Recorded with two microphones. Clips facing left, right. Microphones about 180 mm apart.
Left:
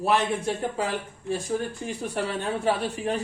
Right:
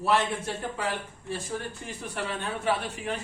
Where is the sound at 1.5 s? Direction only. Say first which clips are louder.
Left 6 dB; 35° left (ahead or behind).